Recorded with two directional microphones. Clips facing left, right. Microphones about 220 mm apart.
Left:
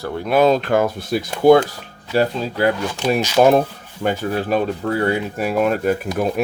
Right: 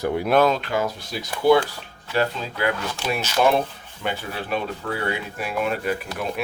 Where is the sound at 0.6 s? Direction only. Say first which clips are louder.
Left 7 dB; 50° left (ahead or behind).